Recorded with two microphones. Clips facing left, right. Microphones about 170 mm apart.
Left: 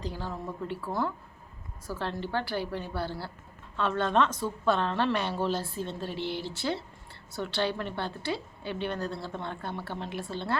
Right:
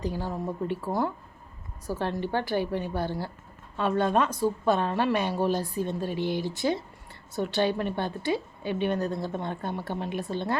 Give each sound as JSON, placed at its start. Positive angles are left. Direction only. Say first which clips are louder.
{"t": 0.0, "sound": "a woman's voice", "louder": "right 5 dB", "side_deg": -15}